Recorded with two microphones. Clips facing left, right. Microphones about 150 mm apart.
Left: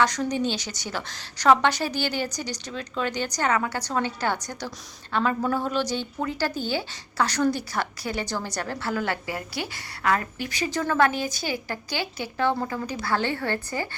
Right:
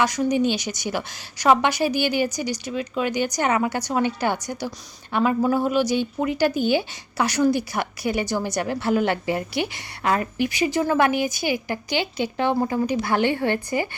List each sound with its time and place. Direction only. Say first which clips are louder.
0.0 s a woman's voice: right 3 dB; 10° right (ahead or behind)